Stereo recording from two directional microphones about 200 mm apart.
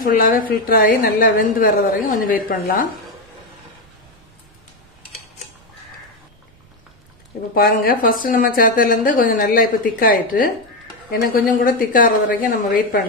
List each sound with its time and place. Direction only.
0.0 s a woman's voice: 45° left (ahead or behind)
7.5 s a woman's voice: 50° left (ahead or behind)